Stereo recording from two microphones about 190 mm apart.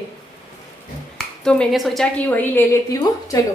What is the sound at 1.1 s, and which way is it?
Speech, 5° left (ahead or behind).